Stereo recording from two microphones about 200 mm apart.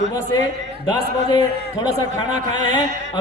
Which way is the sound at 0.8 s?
20° left (ahead or behind).